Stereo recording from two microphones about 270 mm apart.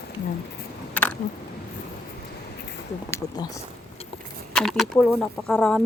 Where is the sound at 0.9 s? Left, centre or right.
Centre.